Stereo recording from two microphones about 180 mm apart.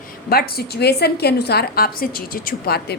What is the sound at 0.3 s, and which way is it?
A woman's voice, 60° left (ahead or behind).